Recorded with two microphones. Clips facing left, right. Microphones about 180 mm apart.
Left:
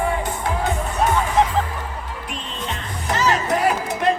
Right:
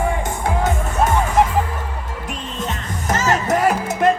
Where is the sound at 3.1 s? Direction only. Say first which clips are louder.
Right 2 dB; 45° right (ahead or behind).